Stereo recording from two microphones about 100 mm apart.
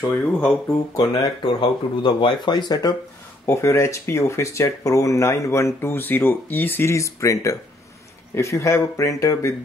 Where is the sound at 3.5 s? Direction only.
30° left (ahead or behind).